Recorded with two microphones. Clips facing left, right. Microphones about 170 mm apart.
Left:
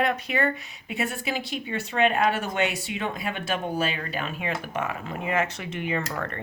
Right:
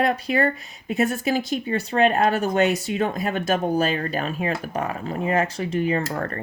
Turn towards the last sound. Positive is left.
turn(degrees=-40)  # may be behind; listen again after turning